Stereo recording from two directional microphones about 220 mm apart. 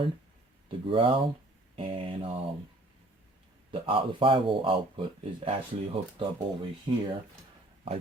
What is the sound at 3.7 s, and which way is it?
Speech, 25° right (ahead or behind).